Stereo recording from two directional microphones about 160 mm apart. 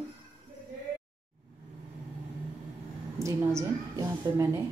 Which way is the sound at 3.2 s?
20° right (ahead or behind).